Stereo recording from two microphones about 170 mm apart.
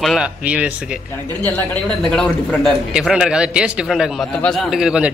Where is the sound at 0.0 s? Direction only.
Centre (ahead or behind).